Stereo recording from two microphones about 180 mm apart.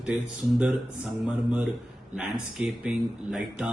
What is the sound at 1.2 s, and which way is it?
A man's voice, 5° right (ahead or behind).